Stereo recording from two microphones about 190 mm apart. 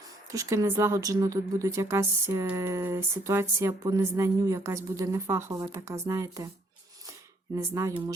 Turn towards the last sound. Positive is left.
turn(degrees=-15)  # may be behind; listen again after turning